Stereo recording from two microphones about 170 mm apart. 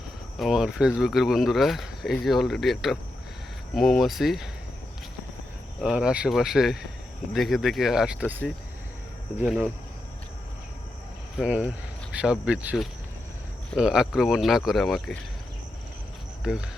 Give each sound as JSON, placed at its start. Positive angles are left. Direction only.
{"t": 0.3, "sound": "speech", "side_deg": 0}
{"t": 5.8, "sound": "speech", "side_deg": -5}
{"t": 11.3, "sound": "speech", "side_deg": -10}
{"t": 16.4, "sound": "speech", "side_deg": -5}